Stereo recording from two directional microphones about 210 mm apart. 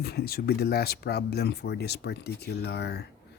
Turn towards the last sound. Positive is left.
turn(degrees=50)  # may be behind; listen again after turning